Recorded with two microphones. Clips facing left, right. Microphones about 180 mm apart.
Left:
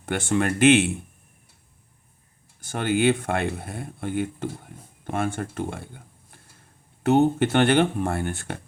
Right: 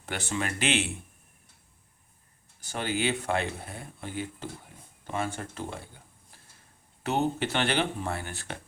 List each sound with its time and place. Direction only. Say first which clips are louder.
0.0 s speech: left 9 dB; 55° left (ahead or behind)
2.6 s speech: left 7 dB; 50° left (ahead or behind)